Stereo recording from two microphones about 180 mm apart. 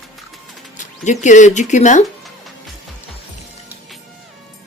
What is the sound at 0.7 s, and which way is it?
Speech, 45° left (ahead or behind).